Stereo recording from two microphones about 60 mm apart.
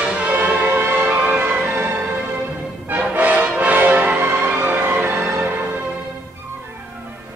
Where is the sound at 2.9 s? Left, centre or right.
Right.